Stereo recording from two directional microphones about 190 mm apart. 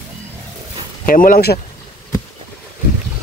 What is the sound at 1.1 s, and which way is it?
Speech, 50° left (ahead or behind).